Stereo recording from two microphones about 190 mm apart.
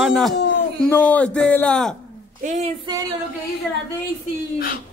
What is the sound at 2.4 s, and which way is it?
Speech, 35° right (ahead or behind).